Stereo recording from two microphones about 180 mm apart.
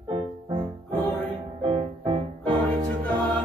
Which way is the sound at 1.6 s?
30° right (ahead or behind).